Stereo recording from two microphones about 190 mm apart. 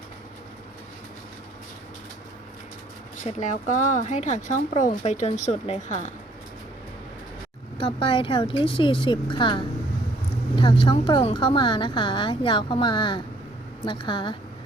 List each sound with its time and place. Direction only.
3.2 s speech: 40° left (ahead or behind)
7.8 s a woman's voice: 30° left (ahead or behind)